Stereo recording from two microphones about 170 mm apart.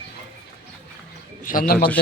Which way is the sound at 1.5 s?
50° left (ahead or behind).